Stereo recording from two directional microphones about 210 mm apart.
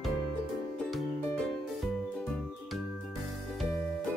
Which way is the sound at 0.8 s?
Centre (ahead or behind).